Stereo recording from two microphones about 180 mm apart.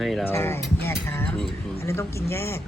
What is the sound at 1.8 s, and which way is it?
Speech, 15° left (ahead or behind).